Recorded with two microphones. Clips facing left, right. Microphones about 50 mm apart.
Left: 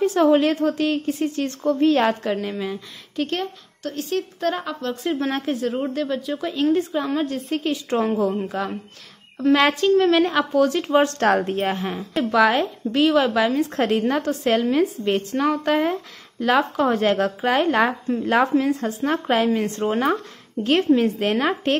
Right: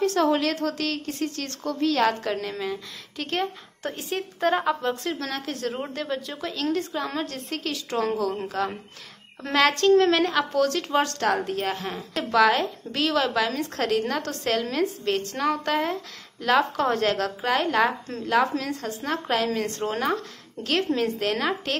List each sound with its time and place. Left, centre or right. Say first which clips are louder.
0.0 s speech: left 5 dB; centre
2.2 s speech: left 3 dB; centre
3.9 s speech: left 8 dB; centre
5.2 s a woman's voice: left 7 dB; left
5.8 s a woman's voice: left 6 dB; centre
6.5 s speech: left 6 dB; centre
7.6 s a woman's voice: left 3 dB; left
9.6 s speech: right 3 dB; centre
11.1 s a woman's voice: left 5 dB; left
11.5 s a woman's voice: left 4 dB; left
12.0 s a woman's voice: left 2 dB; centre; by 21.7 s left